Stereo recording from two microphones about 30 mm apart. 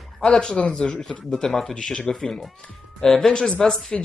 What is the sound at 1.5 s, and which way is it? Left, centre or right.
Speech, centre.